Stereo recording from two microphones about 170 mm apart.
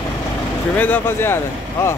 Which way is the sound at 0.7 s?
10° left (ahead or behind).